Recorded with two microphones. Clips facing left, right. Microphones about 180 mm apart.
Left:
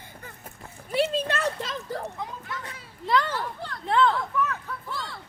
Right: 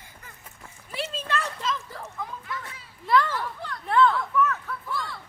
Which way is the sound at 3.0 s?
20° left (ahead or behind).